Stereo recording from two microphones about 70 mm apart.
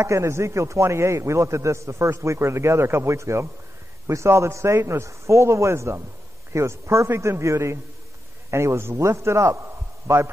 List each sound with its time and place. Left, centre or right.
0.0 s a man's voice: right